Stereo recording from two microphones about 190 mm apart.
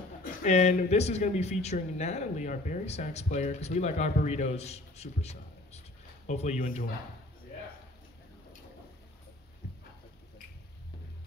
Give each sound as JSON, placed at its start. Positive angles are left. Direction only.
{"t": 0.2, "sound": "speech", "side_deg": 40}